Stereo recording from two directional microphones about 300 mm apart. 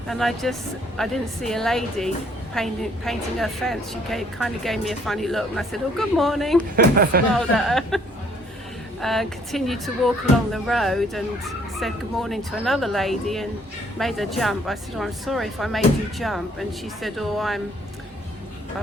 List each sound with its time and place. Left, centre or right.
0.1 s a woman's voice: centre
6.6 s speech: right
7.3 s a woman's voice: centre